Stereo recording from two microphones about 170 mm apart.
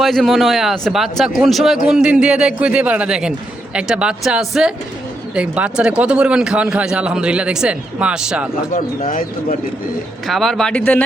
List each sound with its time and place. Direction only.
0.0 s a man's voice: centre (ahead or behind)
9.0 s speech: 50° left (ahead or behind)
10.2 s a man's voice: centre (ahead or behind)